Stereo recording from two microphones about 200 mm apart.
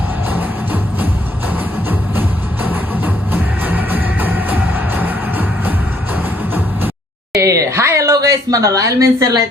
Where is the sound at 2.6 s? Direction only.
10° right (ahead or behind).